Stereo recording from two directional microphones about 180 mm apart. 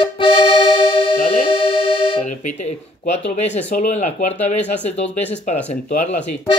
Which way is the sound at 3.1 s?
40° left (ahead or behind).